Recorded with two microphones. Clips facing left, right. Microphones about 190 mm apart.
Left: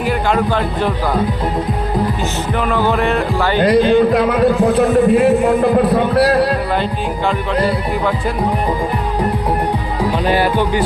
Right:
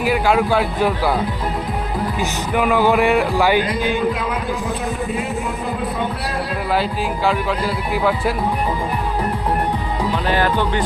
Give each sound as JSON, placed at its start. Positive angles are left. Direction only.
{"t": 0.0, "sound": "music", "side_deg": -5}
{"t": 2.6, "sound": "music", "side_deg": -10}
{"t": 3.6, "sound": "music", "side_deg": 65}
{"t": 10.2, "sound": "speech", "side_deg": 10}